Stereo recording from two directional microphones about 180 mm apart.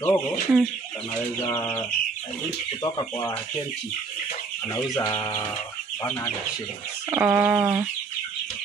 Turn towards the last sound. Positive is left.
turn(degrees=-10)  # may be behind; listen again after turning